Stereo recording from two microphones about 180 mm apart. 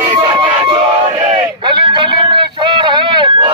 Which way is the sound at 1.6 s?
25° right (ahead or behind).